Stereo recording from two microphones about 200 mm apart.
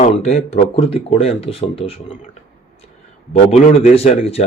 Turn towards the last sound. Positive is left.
turn(degrees=30)  # may be behind; listen again after turning